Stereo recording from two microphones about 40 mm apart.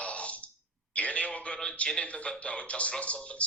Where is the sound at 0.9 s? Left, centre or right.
Left.